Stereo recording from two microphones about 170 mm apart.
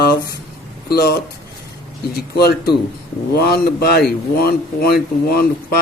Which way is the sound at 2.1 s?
70° left (ahead or behind).